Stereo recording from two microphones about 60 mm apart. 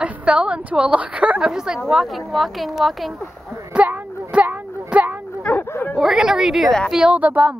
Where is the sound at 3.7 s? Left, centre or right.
Right.